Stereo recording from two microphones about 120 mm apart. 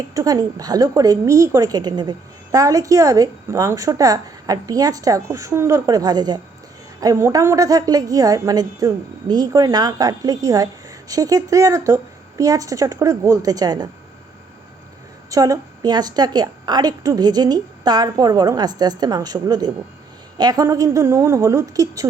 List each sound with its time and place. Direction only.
0.1 s a woman's voice: 30° right (ahead or behind)
15.3 s a woman's voice: 30° right (ahead or behind)